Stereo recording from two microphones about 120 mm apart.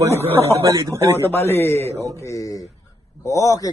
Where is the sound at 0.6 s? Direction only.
25° right (ahead or behind).